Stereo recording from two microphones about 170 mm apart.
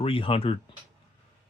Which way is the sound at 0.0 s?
35° left (ahead or behind).